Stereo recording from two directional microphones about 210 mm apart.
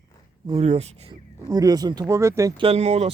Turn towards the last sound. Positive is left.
turn(degrees=-30)  # may be behind; listen again after turning